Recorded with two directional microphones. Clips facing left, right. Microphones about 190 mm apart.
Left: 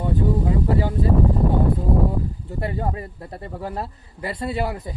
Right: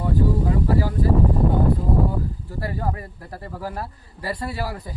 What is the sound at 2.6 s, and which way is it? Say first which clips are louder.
Speech: left 2 dB; 25° left (ahead or behind).